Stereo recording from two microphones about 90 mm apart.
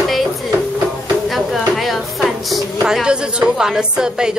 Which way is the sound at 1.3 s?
Centre (ahead or behind).